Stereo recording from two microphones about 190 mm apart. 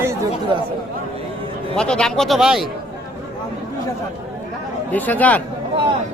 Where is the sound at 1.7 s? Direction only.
5° left (ahead or behind).